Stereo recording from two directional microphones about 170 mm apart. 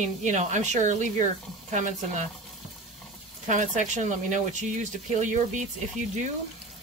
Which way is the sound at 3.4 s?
45° right (ahead or behind).